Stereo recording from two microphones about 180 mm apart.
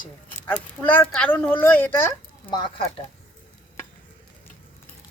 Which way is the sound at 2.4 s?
25° left (ahead or behind).